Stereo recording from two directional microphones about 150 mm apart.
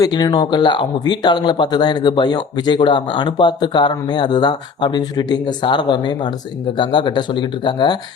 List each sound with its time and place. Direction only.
0.0 s speech: 25° left (ahead or behind)